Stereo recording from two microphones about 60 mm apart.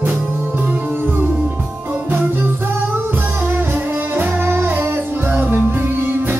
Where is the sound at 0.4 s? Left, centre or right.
Right.